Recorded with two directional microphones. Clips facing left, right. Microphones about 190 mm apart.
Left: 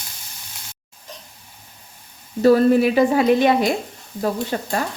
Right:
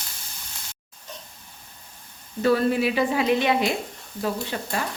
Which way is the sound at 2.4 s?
40° left (ahead or behind).